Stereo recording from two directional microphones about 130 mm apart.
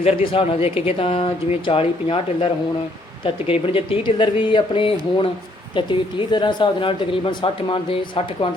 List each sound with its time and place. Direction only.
0.0 s a woman's voice: 50° left (ahead or behind)